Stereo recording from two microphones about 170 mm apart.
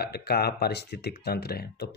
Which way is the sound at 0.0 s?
70° left (ahead or behind).